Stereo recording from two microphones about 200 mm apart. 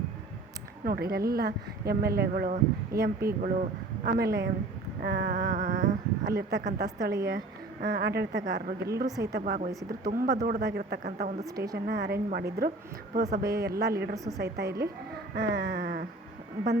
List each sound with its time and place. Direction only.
0.9 s speech: 50° right (ahead or behind)
9.0 s a woman's voice: 15° right (ahead or behind)
9.4 s speech: 40° right (ahead or behind)
14.3 s a sound: 55° right (ahead or behind)